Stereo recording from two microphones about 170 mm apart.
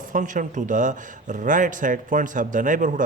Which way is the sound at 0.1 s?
50° right (ahead or behind).